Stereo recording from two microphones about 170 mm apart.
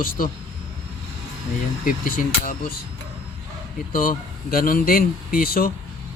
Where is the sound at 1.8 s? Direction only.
55° left (ahead or behind).